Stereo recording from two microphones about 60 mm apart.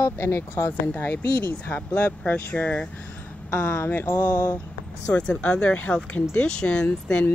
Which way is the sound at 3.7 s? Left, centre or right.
Left.